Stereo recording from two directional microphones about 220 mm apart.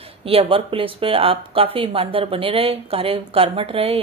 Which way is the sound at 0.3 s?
25° right (ahead or behind).